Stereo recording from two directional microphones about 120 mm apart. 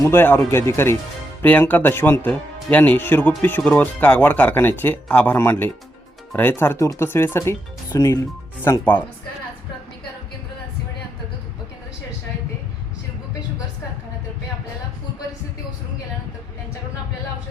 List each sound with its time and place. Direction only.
0.0 s speech: 20° left (ahead or behind)